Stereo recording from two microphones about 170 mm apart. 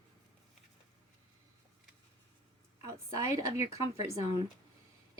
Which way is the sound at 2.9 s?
15° right (ahead or behind).